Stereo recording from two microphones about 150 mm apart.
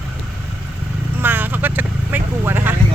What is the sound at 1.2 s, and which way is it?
Vehicle, 15° right (ahead or behind).